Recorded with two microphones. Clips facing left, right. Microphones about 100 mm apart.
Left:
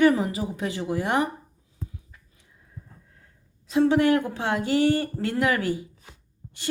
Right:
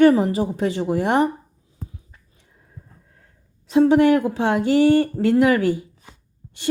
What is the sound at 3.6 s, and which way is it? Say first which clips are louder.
A woman's voice: right 5 dB; 20° right (ahead or behind).